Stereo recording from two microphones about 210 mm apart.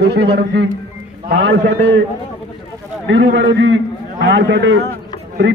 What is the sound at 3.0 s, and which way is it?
A man's voice, 60° right (ahead or behind).